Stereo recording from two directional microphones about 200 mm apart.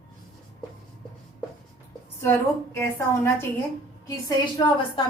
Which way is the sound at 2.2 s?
15° left (ahead or behind).